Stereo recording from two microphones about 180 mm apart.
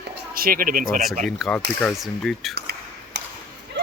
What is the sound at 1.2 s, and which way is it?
Speech, centre (ahead or behind).